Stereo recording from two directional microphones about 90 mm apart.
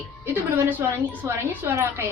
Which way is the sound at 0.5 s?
20° right (ahead or behind).